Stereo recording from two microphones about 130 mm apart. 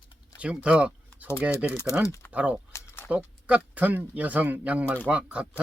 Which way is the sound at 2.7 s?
20° left (ahead or behind).